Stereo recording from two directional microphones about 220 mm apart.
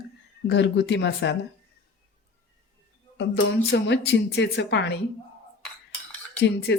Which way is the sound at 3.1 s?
55° left (ahead or behind).